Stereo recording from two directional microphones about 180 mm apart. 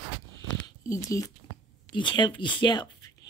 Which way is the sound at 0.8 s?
20° left (ahead or behind).